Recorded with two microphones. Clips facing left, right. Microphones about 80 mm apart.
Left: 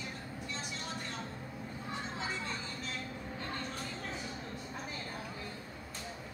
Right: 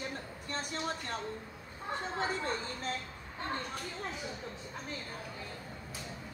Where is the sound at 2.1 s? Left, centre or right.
Right.